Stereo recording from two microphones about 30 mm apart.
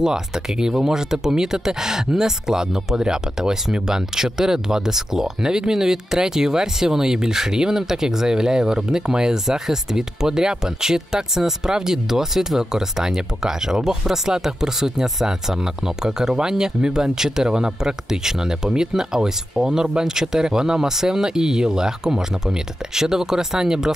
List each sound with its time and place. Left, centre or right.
0.6 s speech: right